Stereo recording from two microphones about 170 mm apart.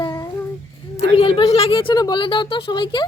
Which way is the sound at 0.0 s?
20° left (ahead or behind).